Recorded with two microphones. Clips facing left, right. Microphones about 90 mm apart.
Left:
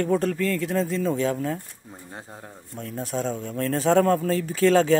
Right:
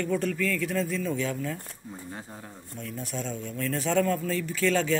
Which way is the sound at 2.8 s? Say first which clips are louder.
Left 6 dB; 45° left (ahead or behind).